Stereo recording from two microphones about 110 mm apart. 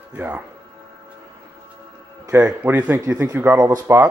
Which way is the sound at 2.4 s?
15° right (ahead or behind).